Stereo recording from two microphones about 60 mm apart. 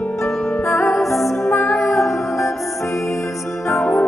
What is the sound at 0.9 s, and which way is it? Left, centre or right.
Music, centre.